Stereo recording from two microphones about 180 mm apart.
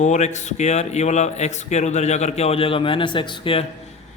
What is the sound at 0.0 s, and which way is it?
A man's voice, 40° left (ahead or behind).